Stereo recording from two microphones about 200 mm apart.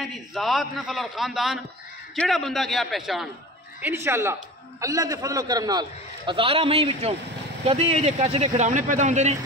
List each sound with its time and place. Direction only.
0.0 s a man's voice: centre (ahead or behind)
3.8 s a man's voice: 10° right (ahead or behind); by 9.4 s 35° right (ahead or behind)